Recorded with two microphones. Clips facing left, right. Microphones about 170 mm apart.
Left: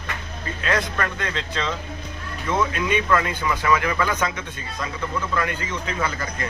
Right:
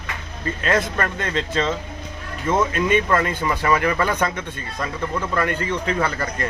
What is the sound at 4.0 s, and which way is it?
Speech, 55° right (ahead or behind).